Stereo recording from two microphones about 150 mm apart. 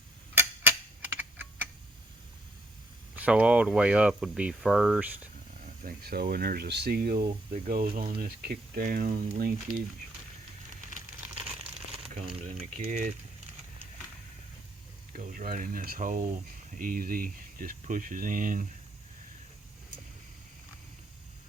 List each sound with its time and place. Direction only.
0.3 s a sound: 10° right (ahead or behind)
3.2 s speech: 10° right (ahead or behind)
5.6 s speech: 80° right
12.4 s speech: 50° right (ahead or behind)
15.1 s speech: 65° right (ahead or behind)